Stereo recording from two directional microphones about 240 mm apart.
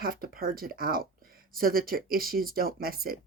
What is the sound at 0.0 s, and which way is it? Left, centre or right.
Speech, right.